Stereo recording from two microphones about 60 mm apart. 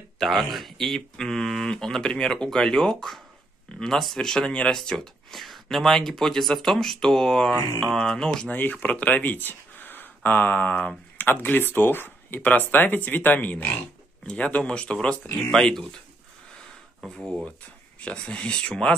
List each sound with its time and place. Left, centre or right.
0.2 s speech: centre
8.5 s speech: left
14.2 s speech: centre
18.0 s speech: centre